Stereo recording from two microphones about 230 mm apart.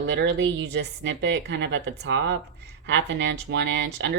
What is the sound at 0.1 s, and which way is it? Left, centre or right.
A woman's voice, right.